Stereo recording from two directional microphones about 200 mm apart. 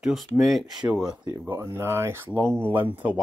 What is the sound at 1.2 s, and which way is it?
Speech, 15° right (ahead or behind).